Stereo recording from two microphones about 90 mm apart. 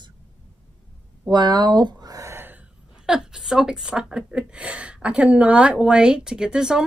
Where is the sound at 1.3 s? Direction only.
55° right (ahead or behind).